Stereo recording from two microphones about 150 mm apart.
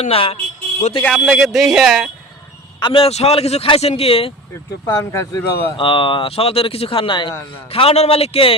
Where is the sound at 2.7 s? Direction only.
35° left (ahead or behind).